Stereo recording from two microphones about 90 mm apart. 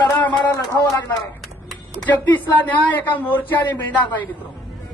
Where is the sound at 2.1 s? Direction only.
20° left (ahead or behind).